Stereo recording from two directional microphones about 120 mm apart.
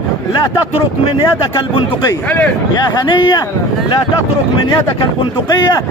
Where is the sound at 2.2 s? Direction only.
15° left (ahead or behind).